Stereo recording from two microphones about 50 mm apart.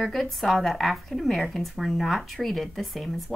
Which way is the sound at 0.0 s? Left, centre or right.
Centre.